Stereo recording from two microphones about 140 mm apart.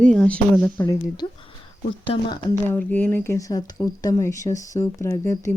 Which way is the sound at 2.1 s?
35° left (ahead or behind).